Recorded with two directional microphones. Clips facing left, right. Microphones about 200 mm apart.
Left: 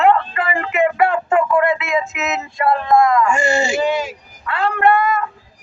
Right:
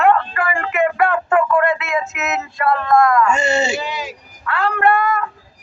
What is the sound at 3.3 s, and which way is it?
Speech, 25° right (ahead or behind).